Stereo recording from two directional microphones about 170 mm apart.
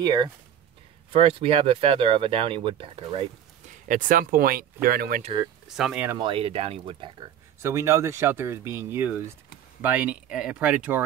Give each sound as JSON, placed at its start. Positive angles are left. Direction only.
{"t": 0.0, "sound": "speech", "side_deg": -25}
{"t": 3.8, "sound": "speech", "side_deg": -50}
{"t": 5.8, "sound": "speech", "side_deg": -5}
{"t": 6.1, "sound": "speech", "side_deg": -30}
{"t": 7.6, "sound": "speech", "side_deg": -15}